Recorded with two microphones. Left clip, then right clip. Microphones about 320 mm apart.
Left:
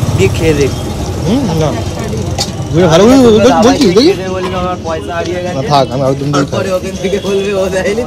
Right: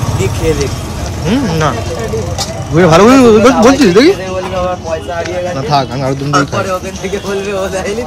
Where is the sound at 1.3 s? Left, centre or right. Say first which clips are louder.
Right 1 dB; centre.